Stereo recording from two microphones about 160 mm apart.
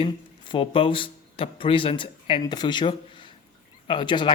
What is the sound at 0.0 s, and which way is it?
A man's voice, 35° left (ahead or behind).